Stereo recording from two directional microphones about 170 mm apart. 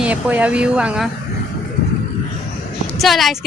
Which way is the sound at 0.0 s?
10° right (ahead or behind).